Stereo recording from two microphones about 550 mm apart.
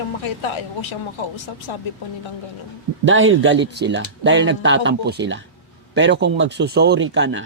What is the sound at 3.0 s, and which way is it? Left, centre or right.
Speech, right.